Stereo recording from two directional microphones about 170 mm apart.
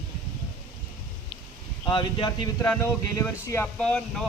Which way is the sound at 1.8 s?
25° left (ahead or behind).